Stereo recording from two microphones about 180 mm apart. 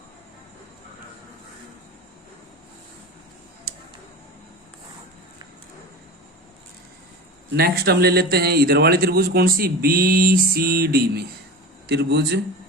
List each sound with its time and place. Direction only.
7.5 s a man's voice: 60° right (ahead or behind)